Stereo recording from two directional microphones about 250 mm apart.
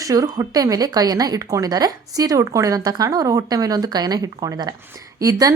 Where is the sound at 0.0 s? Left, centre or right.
Centre.